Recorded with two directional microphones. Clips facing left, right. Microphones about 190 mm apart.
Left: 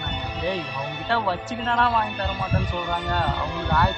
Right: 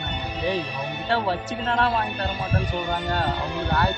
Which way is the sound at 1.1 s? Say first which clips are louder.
Even; 35° right (ahead or behind).